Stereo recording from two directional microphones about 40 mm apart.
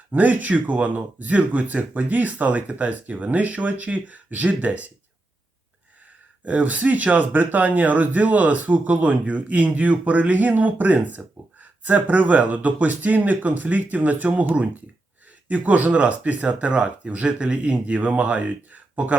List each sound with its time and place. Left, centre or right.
0.1 s speech: right
6.4 s speech: right
15.4 s speech: right